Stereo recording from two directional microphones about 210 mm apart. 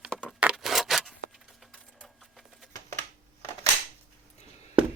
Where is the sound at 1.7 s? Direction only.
Centre (ahead or behind).